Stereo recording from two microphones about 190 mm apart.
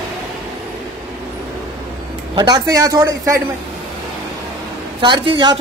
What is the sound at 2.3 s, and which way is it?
A man's voice, 20° right (ahead or behind).